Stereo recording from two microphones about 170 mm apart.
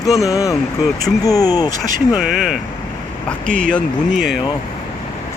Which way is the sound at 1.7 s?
50° right (ahead or behind).